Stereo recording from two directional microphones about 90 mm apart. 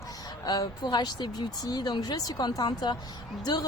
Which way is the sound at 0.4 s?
45° left (ahead or behind).